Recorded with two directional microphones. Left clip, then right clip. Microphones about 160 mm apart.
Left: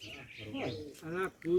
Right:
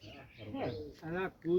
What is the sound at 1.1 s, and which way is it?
Speech, 10° right (ahead or behind).